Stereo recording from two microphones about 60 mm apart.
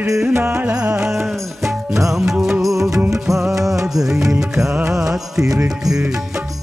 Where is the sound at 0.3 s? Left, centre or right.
Right.